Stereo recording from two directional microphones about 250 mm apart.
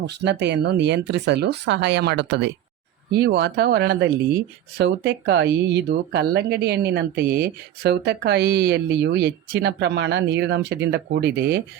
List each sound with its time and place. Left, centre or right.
0.0 s speech: right